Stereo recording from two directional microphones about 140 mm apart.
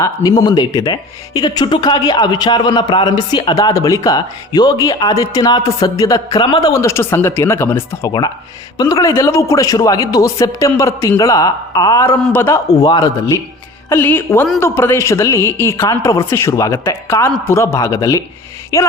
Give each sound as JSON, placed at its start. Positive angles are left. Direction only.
{"t": 0.0, "sound": "speech", "side_deg": 25}
{"t": 12.2, "sound": "a woman's voice", "side_deg": 15}